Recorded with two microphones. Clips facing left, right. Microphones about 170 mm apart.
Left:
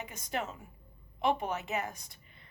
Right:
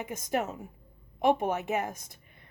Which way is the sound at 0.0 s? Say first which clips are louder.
Right 6 dB; 50° right (ahead or behind).